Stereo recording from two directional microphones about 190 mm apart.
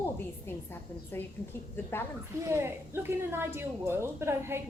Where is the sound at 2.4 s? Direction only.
15° right (ahead or behind).